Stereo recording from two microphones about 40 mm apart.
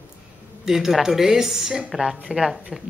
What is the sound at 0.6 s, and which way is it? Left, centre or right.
Speech, centre.